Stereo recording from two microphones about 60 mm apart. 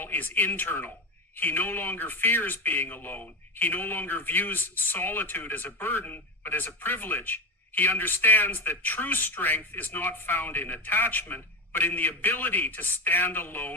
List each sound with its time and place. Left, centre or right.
0.0 s a man's voice: left